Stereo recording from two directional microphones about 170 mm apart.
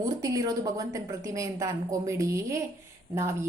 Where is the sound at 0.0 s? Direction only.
20° right (ahead or behind).